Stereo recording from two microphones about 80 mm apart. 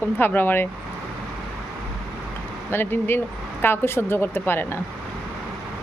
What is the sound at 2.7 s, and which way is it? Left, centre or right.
Speech, left.